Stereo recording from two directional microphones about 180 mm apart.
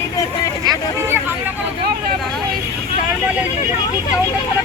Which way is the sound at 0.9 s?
15° right (ahead or behind).